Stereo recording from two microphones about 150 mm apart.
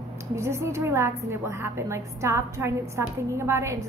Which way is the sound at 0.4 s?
20° right (ahead or behind).